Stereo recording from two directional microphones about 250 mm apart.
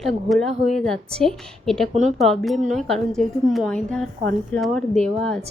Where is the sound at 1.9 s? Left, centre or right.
Right.